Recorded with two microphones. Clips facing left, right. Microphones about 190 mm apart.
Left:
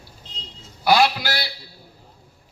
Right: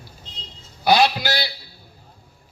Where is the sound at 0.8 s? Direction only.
20° right (ahead or behind).